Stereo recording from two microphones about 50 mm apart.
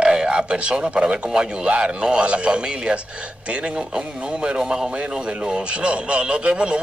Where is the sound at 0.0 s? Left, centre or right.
Centre.